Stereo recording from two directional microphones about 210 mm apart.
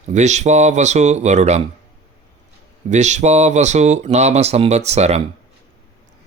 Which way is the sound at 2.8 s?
35° right (ahead or behind).